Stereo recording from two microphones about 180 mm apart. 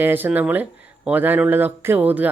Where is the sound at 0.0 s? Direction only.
10° right (ahead or behind).